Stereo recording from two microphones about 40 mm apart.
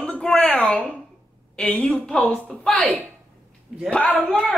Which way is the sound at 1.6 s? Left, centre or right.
Left.